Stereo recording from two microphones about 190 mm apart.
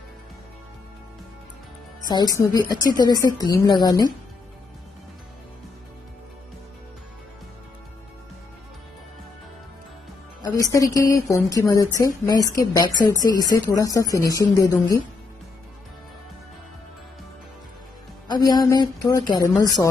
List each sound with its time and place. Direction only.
2.0 s a woman's voice: 20° left (ahead or behind)
10.4 s a woman's voice: 15° left (ahead or behind)
18.3 s a woman's voice: 20° left (ahead or behind)